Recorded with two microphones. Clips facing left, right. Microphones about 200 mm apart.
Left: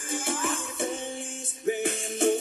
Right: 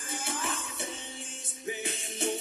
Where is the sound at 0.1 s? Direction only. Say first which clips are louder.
Left 6 dB; 50° left (ahead or behind).